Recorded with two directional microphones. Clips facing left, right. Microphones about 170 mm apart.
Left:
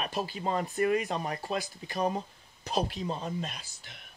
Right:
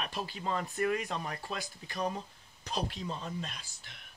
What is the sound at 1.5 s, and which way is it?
Speech, 45° left (ahead or behind).